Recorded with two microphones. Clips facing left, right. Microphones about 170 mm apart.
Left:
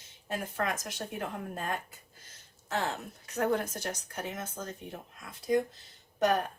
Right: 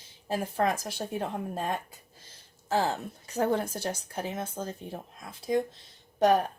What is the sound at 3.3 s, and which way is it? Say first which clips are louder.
Speech: right 2 dB; 30° right (ahead or behind).